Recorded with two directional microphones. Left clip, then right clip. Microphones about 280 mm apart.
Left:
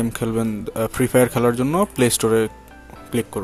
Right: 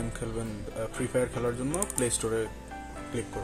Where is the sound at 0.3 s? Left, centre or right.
Left.